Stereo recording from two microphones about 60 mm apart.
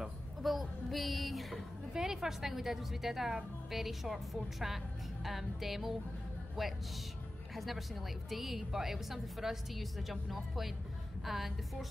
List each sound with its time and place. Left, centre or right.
0.0 s a woman's voice: centre